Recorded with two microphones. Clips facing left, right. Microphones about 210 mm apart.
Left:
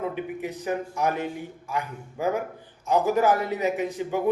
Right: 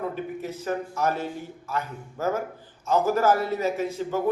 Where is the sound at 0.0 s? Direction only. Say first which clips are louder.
Left 1 dB; 15° left (ahead or behind).